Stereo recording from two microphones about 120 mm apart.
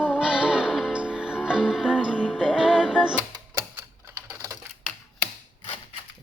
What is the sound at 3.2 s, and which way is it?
Typewriter, 20° right (ahead or behind).